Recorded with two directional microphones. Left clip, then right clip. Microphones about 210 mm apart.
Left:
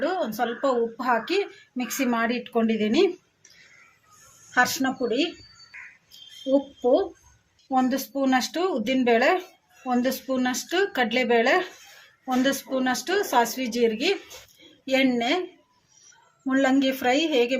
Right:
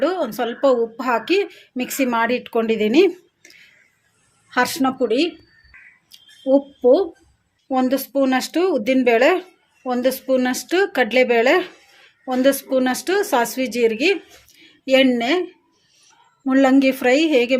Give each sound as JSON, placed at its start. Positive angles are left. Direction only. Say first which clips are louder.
{"t": 0.0, "sound": "a woman's voice", "louder": "right 5 dB", "side_deg": -45}
{"t": 4.5, "sound": "speech", "louder": "right 3 dB", "side_deg": -40}
{"t": 6.1, "sound": "a sound", "louder": "right 6 dB", "side_deg": -40}
{"t": 7.7, "sound": "a woman's voice", "louder": "right 5 dB", "side_deg": -50}
{"t": 16.5, "sound": "a woman's voice", "louder": "right 7 dB", "side_deg": -40}